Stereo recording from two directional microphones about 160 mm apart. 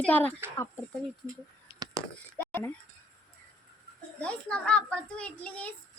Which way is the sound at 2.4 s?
15° left (ahead or behind).